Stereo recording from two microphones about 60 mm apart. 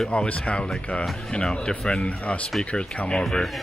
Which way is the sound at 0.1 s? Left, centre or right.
Centre.